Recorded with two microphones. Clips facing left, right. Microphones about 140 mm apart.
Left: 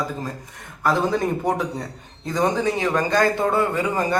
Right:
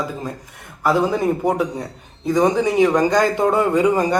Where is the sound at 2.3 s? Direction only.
15° right (ahead or behind).